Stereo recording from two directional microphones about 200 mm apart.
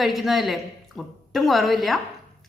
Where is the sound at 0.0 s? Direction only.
Centre (ahead or behind).